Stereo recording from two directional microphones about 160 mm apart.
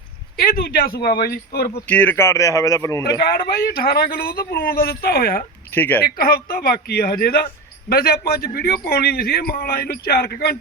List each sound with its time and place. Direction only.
0.3 s a man's voice: 70° left (ahead or behind)
1.9 s speech: 10° left (ahead or behind)
3.2 s a man's voice: 70° left (ahead or behind)
5.7 s speech: 10° left (ahead or behind)
6.1 s a man's voice: 70° left (ahead or behind); by 10.6 s 85° left